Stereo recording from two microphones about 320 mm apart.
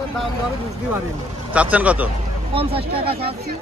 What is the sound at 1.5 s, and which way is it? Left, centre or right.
Speech, centre.